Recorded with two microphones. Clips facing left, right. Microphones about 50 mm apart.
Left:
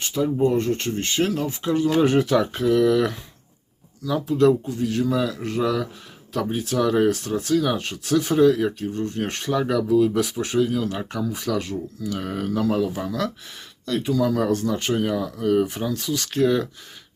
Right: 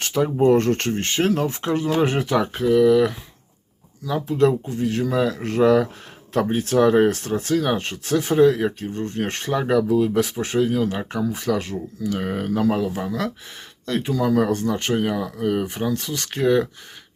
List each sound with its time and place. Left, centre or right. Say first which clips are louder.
0.0 s speech: right 3 dB; right
1.9 s speech: left 2 dB; right; by 3.2 s centre
4.0 s speech: left 1 dB; right
6.7 s speech: right 4 dB; right
9.6 s speech: even; right
12.8 s speech: even; centre
13.1 s speech: even; right
14.9 s speech: right 1 dB; right
15.9 s speech: even; right
16.4 s speech: right 2 dB; right